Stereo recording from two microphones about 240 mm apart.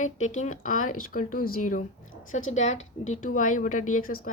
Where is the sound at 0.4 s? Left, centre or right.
Left.